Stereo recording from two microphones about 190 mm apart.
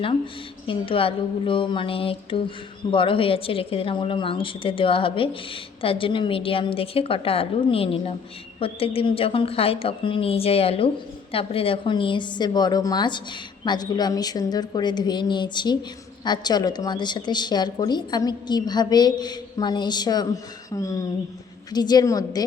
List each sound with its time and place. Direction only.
0.7 s a woman's voice: 30° left (ahead or behind)